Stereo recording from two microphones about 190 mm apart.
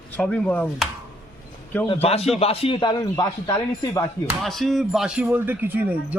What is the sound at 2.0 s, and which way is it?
A man's voice, 30° left (ahead or behind).